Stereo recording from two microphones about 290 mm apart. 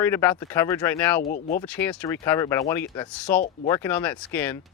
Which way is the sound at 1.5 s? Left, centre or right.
Centre.